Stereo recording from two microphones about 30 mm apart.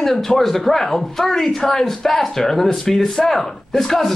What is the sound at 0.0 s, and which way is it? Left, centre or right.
Speech, centre.